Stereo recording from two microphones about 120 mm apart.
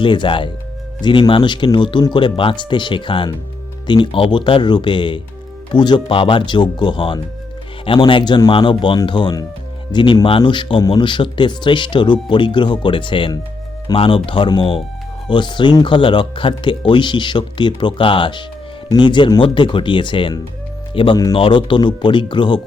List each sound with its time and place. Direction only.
0.0 s speech: 45° left (ahead or behind)